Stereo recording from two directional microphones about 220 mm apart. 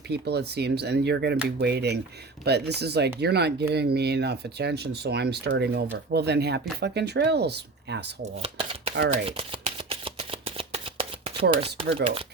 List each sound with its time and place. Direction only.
0.1 s speech: 50° right (ahead or behind)
8.2 s speech: 25° right (ahead or behind)
9.0 s shuffling cards: 25° right (ahead or behind)
11.5 s speech: 25° right (ahead or behind)